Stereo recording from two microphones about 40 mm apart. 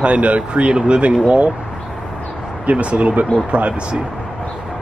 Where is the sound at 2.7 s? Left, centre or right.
Right.